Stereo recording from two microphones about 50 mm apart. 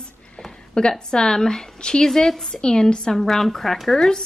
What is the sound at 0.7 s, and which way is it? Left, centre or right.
Speech, centre.